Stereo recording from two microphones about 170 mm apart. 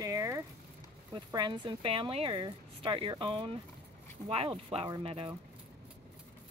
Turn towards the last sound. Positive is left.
turn(degrees=-35)  # may be behind; listen again after turning